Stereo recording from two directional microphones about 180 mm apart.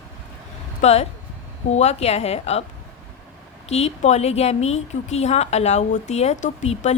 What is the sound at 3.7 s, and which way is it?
A woman's voice, 40° left (ahead or behind).